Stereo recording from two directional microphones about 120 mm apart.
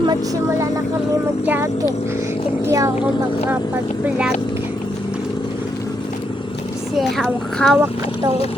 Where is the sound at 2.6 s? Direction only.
25° right (ahead or behind).